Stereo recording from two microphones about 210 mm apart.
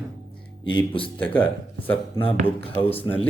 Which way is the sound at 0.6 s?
25° left (ahead or behind).